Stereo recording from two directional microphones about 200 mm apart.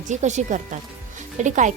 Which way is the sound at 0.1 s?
35° right (ahead or behind).